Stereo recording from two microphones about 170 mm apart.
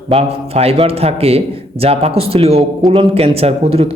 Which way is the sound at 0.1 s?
35° right (ahead or behind).